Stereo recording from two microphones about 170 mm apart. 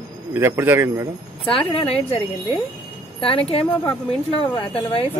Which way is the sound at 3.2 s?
35° left (ahead or behind).